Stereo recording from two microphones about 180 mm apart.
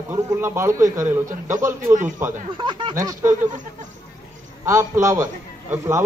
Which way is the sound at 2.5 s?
25° right (ahead or behind).